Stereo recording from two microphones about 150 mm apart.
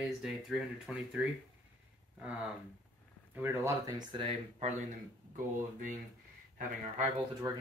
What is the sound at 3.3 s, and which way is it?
Speech, 15° right (ahead or behind).